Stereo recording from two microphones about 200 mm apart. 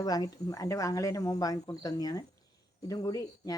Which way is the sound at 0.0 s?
20° left (ahead or behind).